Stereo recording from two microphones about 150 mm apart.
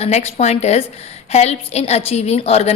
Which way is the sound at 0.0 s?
45° left (ahead or behind).